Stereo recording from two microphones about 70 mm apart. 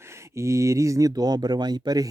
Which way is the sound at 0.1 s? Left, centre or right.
Right.